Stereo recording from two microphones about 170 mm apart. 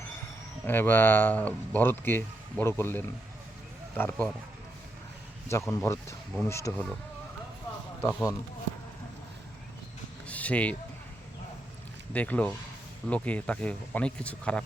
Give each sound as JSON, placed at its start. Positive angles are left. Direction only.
{"t": 0.6, "sound": "speech", "side_deg": 10}
{"t": 5.5, "sound": "speech", "side_deg": 15}
{"t": 8.0, "sound": "speech", "side_deg": 20}
{"t": 10.2, "sound": "a sound", "side_deg": 10}
{"t": 12.1, "sound": "speech", "side_deg": 10}